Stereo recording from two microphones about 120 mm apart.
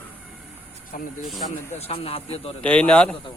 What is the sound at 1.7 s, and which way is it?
Speech, 55° left (ahead or behind).